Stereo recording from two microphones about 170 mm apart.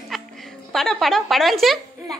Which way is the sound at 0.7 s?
Centre (ahead or behind).